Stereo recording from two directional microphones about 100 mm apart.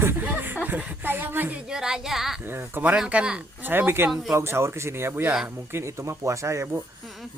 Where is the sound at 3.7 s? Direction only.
20° right (ahead or behind).